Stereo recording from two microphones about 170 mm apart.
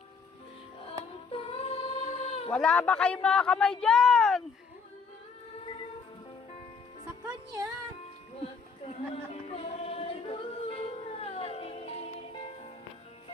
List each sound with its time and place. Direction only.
1.3 s female singing: 35° left (ahead or behind)
2.5 s a man's voice: 5° left (ahead or behind)
7.3 s music: 20° right (ahead or behind)
9.3 s singing: 35° left (ahead or behind)